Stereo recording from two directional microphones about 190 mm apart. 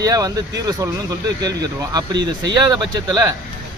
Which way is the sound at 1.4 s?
20° right (ahead or behind).